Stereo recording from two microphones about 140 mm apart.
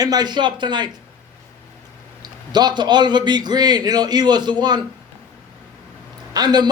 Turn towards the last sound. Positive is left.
turn(degrees=-30)  # may be behind; listen again after turning